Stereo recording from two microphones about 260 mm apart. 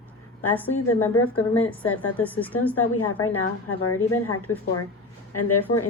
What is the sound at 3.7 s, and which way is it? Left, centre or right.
Speech, left.